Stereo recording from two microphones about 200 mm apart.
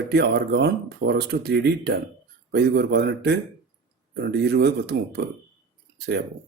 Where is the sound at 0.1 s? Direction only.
55° right (ahead or behind).